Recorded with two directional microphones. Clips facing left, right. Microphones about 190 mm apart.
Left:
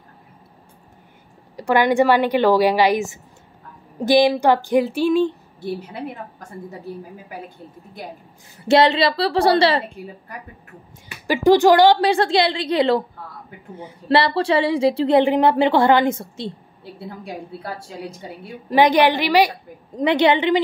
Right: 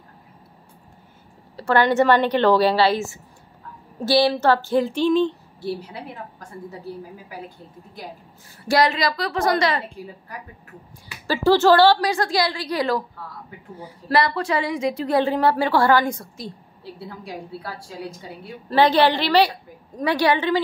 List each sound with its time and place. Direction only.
1.6 s a woman's voice: 10° left (ahead or behind)
5.6 s a woman's voice: 55° left (ahead or behind)
8.6 s a woman's voice: 25° left (ahead or behind)
11.2 s a woman's voice: 15° left (ahead or behind)
17.6 s a woman's voice: 20° left (ahead or behind)